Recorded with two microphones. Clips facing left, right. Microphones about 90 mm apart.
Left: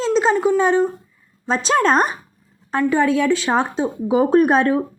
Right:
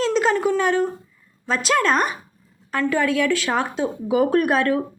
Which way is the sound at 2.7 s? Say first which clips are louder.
Left 4 dB; 25° left (ahead or behind).